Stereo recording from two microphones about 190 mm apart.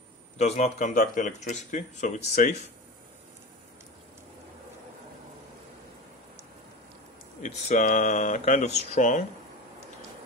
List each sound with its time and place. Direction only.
0.4 s speech: 35° left (ahead or behind)
7.4 s speech: 40° left (ahead or behind)